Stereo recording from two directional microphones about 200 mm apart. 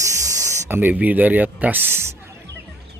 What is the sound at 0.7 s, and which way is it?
Speech, 10° right (ahead or behind).